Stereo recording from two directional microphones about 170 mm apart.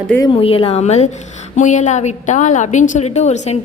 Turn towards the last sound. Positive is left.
turn(degrees=40)  # may be behind; listen again after turning